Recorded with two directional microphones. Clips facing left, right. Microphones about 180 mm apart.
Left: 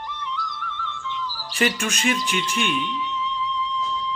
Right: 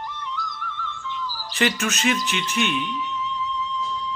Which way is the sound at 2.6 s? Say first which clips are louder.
Even; 45° right (ahead or behind).